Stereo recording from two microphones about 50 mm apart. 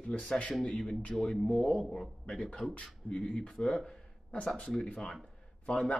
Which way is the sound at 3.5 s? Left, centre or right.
Centre.